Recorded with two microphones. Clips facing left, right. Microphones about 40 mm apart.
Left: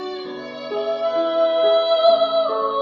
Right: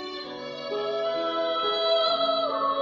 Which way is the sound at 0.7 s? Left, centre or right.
Left.